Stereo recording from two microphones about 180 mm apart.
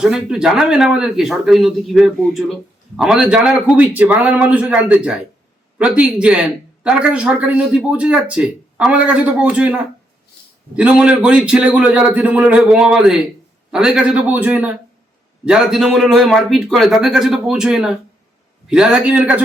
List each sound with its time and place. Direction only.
0.0 s a man's voice: 5° right (ahead or behind)